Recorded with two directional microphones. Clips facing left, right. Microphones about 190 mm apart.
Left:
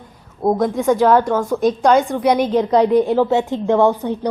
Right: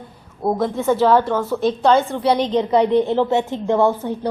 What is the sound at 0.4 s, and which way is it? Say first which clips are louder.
A woman's voice: left 3 dB; 20° left (ahead or behind).